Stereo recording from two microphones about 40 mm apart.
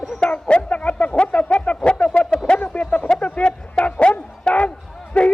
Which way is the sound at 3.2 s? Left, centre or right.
Left.